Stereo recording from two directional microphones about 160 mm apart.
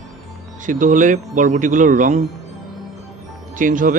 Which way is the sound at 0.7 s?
55° right (ahead or behind).